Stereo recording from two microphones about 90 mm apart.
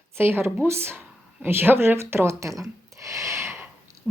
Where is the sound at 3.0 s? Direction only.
35° right (ahead or behind).